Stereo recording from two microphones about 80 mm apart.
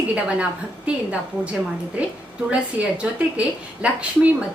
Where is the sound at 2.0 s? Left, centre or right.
Centre.